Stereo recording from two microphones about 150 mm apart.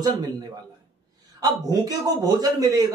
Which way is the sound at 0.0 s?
25° right (ahead or behind).